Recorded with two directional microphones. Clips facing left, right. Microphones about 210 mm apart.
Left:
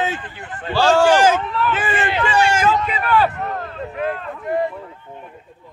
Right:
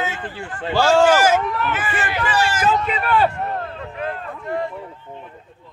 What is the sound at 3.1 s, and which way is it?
Speech, 25° right (ahead or behind).